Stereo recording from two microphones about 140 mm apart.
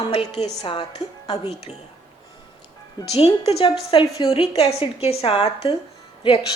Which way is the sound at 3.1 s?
45° left (ahead or behind).